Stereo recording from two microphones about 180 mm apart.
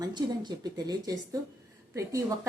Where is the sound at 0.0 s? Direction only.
25° right (ahead or behind).